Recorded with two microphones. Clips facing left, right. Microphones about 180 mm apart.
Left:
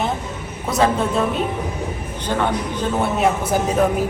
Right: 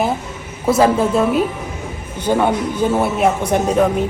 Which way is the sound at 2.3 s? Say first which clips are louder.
Right 5 dB; 10° right (ahead or behind).